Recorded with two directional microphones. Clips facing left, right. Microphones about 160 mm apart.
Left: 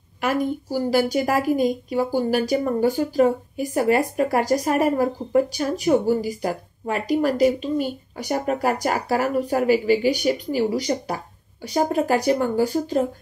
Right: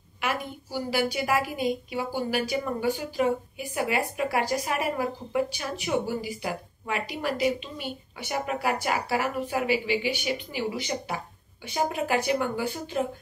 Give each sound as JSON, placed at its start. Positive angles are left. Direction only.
{"t": 0.2, "sound": "speech", "side_deg": 40}